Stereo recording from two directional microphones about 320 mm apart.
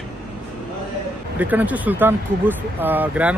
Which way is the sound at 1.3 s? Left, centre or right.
Centre.